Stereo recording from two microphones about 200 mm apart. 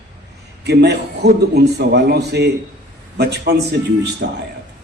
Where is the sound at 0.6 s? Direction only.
55° right (ahead or behind).